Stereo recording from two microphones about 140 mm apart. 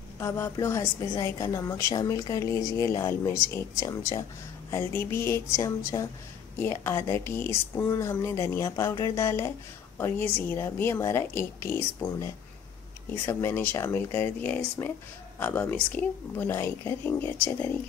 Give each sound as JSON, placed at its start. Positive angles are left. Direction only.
{"t": 0.2, "sound": "a woman's voice", "side_deg": 20}